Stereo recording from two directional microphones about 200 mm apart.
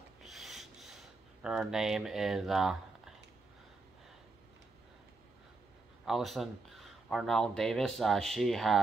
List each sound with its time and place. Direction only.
0.2 s filing: centre (ahead or behind)
1.4 s speech: 5° right (ahead or behind)
6.0 s speech: centre (ahead or behind)